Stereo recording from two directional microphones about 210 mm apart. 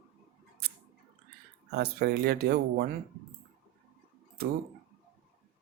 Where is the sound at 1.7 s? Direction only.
50° right (ahead or behind).